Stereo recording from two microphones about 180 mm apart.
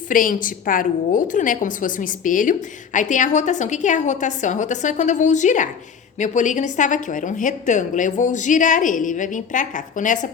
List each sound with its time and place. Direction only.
0.1 s a woman's voice: 50° left (ahead or behind)